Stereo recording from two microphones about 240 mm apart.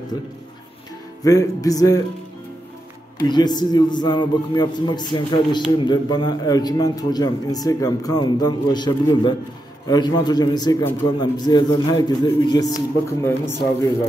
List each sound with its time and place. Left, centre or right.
1.2 s a man's voice: centre
3.3 s a man's voice: centre